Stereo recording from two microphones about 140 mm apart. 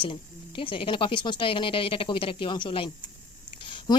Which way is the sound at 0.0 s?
35° left (ahead or behind).